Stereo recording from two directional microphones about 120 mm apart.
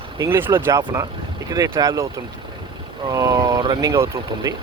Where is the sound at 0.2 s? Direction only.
20° right (ahead or behind).